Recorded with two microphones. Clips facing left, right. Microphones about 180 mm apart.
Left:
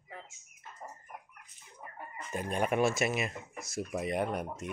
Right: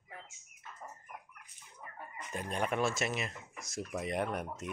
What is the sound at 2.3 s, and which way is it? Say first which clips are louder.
Speech: left 4 dB; 5° left (ahead or behind).